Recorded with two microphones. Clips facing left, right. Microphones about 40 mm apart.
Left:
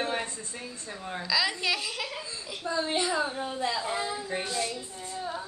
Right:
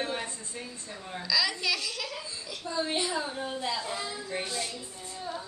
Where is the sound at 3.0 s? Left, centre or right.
Left.